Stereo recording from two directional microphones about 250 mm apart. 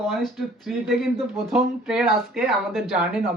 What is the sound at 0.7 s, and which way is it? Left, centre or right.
Speech, centre.